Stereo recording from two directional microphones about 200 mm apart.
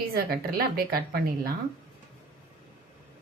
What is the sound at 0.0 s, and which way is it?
A woman's voice, 50° right (ahead or behind).